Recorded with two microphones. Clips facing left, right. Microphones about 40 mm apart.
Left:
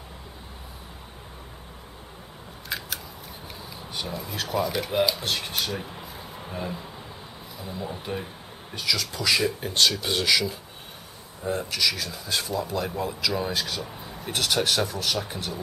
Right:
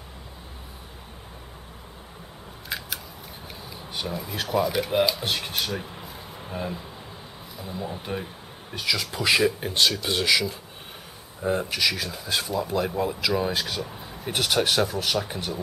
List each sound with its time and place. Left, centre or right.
2.7 s scissors: centre
3.7 s speech: centre
9.4 s speech: centre
11.4 s speech: centre